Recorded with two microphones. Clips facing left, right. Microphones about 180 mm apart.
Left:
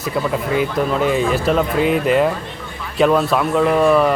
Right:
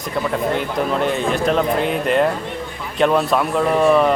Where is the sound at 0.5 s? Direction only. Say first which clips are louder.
Left 2 dB; 5° left (ahead or behind).